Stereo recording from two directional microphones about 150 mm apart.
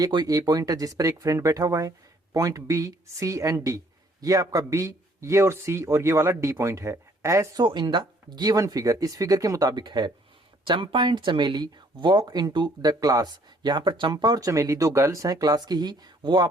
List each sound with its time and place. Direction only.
0.0 s speech: 25° right (ahead or behind)
7.6 s speech: 30° right (ahead or behind)